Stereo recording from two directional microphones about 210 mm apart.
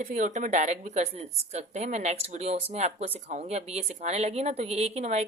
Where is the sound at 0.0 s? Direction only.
35° right (ahead or behind).